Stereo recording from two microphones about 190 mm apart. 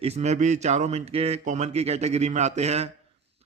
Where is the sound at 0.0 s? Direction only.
35° right (ahead or behind).